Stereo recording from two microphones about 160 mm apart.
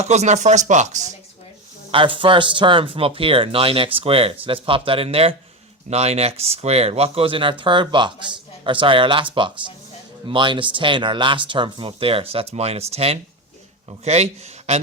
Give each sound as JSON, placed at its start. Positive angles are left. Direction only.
{"t": 0.0, "sound": "speech", "side_deg": -45}
{"t": 1.9, "sound": "speech", "side_deg": -30}